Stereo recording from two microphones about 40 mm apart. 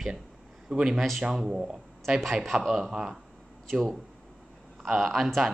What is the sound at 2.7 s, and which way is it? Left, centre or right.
Speech, centre.